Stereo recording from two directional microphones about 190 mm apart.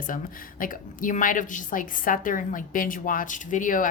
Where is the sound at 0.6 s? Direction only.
45° left (ahead or behind).